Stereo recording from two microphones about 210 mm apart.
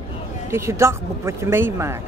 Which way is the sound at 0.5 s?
15° right (ahead or behind).